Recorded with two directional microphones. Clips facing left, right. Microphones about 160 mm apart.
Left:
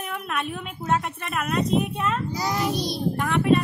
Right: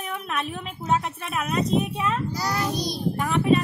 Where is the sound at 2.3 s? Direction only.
15° left (ahead or behind).